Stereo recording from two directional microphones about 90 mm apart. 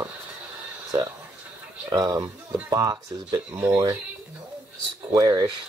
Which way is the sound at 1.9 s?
45° right (ahead or behind).